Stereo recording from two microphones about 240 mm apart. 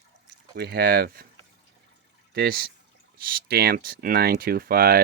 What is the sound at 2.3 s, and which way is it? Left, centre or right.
Speech, right.